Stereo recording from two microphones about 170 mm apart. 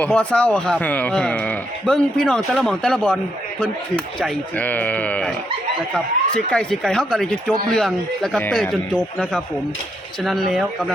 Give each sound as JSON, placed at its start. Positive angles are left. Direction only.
{"t": 0.0, "sound": "speech", "side_deg": 5}
{"t": 10.5, "sound": "speech", "side_deg": 0}